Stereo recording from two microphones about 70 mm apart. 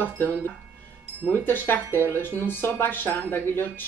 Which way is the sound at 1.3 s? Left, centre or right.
Left.